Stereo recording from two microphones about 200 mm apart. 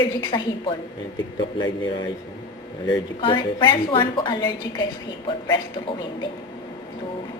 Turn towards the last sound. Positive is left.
turn(degrees=20)  # may be behind; listen again after turning